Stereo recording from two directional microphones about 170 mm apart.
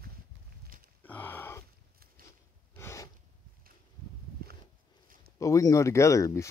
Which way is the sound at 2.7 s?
15° left (ahead or behind).